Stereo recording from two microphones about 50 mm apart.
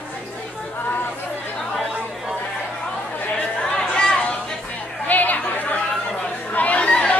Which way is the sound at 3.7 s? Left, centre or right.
Centre.